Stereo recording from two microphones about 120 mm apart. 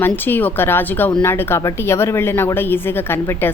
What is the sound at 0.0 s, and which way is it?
A woman's voice, 15° left (ahead or behind).